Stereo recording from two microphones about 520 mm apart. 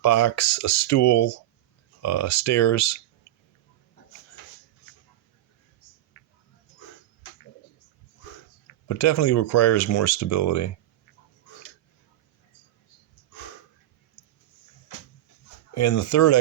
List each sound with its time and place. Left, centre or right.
0.0 s speech: left
8.9 s speech: left
15.7 s speech: left